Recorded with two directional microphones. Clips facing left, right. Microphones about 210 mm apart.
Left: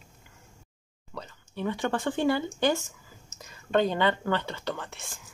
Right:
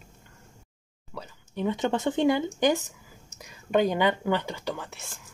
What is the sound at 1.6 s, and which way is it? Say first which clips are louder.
Speech: right 3 dB; 20° right (ahead or behind).